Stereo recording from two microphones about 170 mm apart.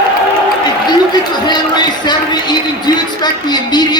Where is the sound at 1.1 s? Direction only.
25° left (ahead or behind).